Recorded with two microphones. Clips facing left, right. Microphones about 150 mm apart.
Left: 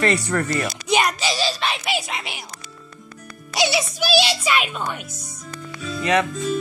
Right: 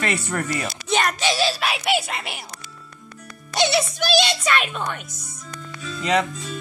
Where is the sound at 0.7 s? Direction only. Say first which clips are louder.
Left 2 dB; 10° left (ahead or behind).